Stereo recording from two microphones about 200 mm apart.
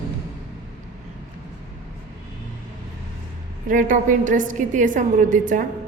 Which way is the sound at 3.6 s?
40° right (ahead or behind).